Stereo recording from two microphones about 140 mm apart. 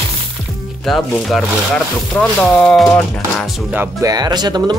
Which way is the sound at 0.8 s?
Centre (ahead or behind).